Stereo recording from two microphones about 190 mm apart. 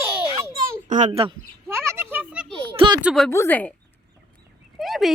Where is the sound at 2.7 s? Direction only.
25° right (ahead or behind).